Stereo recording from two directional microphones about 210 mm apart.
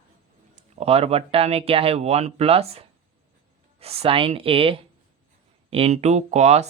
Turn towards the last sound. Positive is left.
turn(degrees=-30)  # may be behind; listen again after turning